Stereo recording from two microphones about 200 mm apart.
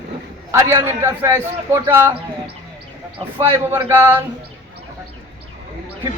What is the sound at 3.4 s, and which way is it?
Speech, 10° right (ahead or behind).